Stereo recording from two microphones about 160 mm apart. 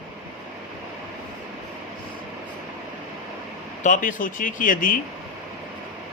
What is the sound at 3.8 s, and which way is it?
A man's voice, 55° left (ahead or behind).